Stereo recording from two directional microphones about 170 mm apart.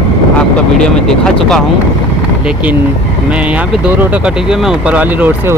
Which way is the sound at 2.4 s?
10° right (ahead or behind).